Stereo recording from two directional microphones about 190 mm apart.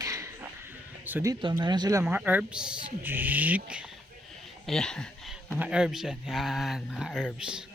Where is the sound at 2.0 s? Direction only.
10° right (ahead or behind).